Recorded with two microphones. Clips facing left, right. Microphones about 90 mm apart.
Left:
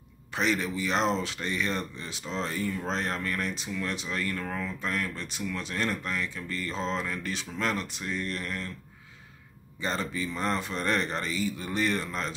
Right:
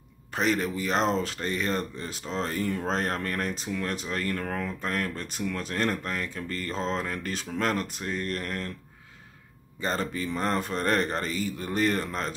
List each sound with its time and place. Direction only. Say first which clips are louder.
0.3 s speech: right 2 dB; 45° right (ahead or behind)
9.8 s speech: right 2 dB; 45° right (ahead or behind)